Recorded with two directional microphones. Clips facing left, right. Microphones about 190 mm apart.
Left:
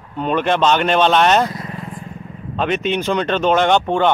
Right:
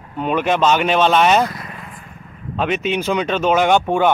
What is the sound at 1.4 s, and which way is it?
Vehicle, 30° left (ahead or behind).